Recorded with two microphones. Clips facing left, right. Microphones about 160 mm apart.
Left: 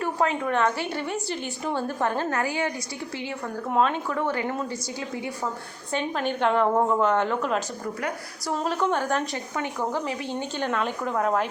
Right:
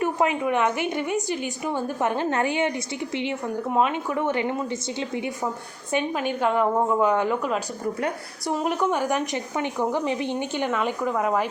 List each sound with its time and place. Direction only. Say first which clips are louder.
0.0 s a woman's voice: right 2 dB; 15° right (ahead or behind)
3.8 s a woman's voice: even; 15° right (ahead or behind)